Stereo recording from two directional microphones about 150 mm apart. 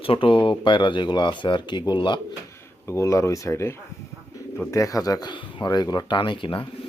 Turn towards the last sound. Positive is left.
turn(degrees=35)  # may be behind; listen again after turning